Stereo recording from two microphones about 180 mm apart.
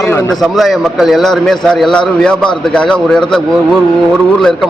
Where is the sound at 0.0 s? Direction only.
15° left (ahead or behind).